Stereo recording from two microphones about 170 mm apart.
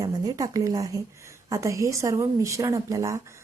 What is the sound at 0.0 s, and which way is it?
A woman's voice, 20° right (ahead or behind).